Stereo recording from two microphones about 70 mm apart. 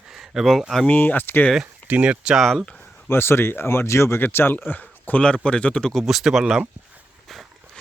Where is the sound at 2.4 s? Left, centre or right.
Centre.